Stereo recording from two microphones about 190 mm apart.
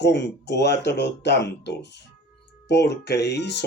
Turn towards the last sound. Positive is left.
turn(degrees=65)  # may be behind; listen again after turning